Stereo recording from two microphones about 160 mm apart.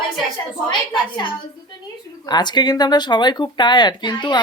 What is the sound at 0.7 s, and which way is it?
Speech, 30° left (ahead or behind).